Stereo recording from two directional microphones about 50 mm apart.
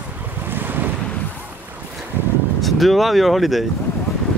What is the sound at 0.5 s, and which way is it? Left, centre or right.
Waves, right.